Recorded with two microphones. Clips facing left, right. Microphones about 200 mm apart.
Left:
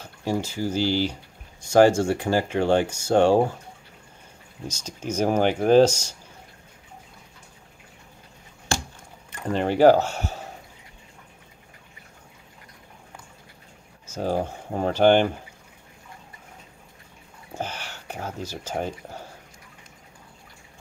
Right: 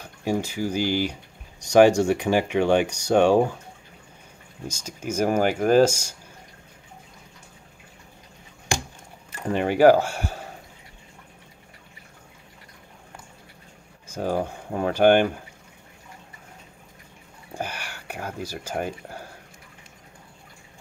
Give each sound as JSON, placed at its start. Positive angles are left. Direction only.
{"t": 0.0, "sound": "speech", "side_deg": -15}
{"t": 4.8, "sound": "speech", "side_deg": -10}
{"t": 8.7, "sound": "a sound", "side_deg": -15}
{"t": 9.5, "sound": "speech", "side_deg": -10}
{"t": 14.4, "sound": "speech", "side_deg": -10}
{"t": 17.6, "sound": "speech", "side_deg": -10}